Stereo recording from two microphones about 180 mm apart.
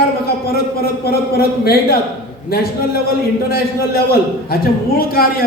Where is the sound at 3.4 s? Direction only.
55° left (ahead or behind).